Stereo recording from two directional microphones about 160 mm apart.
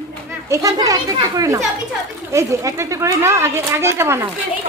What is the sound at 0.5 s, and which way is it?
Children playing, 20° right (ahead or behind).